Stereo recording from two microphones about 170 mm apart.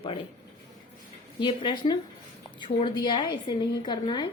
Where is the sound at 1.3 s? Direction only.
30° left (ahead or behind).